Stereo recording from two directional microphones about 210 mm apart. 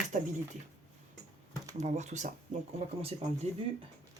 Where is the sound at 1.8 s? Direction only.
35° right (ahead or behind).